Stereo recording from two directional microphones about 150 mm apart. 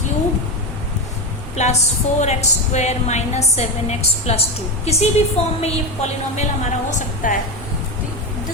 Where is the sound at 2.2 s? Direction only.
50° left (ahead or behind).